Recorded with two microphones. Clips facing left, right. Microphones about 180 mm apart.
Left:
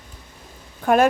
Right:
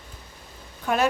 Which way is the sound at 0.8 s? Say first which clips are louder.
Left 7 dB; 50° left (ahead or behind).